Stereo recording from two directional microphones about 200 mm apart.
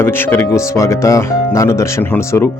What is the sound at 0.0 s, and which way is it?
Speech, 10° left (ahead or behind).